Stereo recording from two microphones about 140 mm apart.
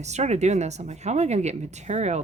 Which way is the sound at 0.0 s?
55° right (ahead or behind).